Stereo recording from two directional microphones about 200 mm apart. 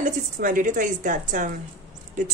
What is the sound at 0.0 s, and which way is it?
Speech, 40° right (ahead or behind).